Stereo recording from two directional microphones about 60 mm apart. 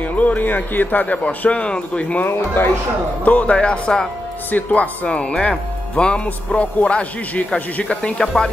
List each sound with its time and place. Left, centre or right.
0.0 s speech: left
2.2 s speech: left
3.3 s speech: left
4.5 s speech: left